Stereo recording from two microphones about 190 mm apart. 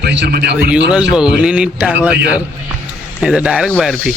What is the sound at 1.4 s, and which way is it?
Speech, 5° right (ahead or behind).